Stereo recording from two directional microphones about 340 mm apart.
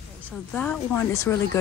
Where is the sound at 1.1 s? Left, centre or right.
Centre.